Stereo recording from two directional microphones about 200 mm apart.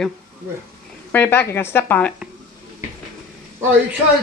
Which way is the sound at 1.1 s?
10° left (ahead or behind).